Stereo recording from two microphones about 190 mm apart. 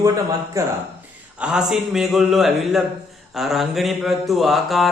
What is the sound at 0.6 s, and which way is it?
Speech, 15° right (ahead or behind).